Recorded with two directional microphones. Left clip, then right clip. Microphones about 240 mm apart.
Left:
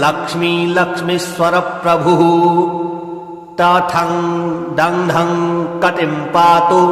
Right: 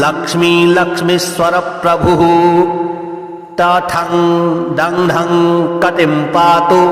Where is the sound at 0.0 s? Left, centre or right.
Right.